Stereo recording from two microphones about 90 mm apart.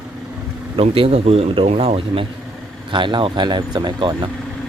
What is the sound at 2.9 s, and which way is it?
Speech, 60° right (ahead or behind).